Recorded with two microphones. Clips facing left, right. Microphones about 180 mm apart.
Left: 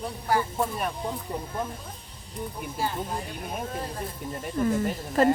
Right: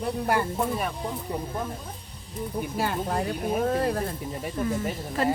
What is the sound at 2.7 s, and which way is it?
Speech, 70° right (ahead or behind).